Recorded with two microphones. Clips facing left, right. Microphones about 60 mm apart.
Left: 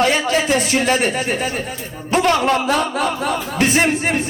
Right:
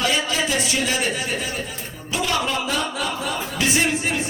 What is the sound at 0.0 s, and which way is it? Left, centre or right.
A man's voice, left.